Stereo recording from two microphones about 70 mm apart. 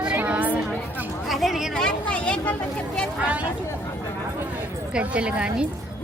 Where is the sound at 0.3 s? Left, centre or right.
Right.